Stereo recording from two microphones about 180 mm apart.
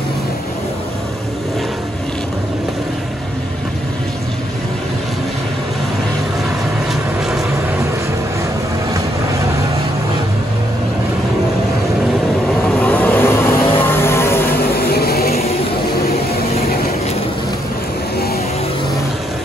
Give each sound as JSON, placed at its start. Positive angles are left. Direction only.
{"t": 6.9, "sound": "vehicle", "side_deg": 0}
{"t": 12.7, "sound": "vehicle", "side_deg": 10}
{"t": 14.9, "sound": "a sound", "side_deg": 60}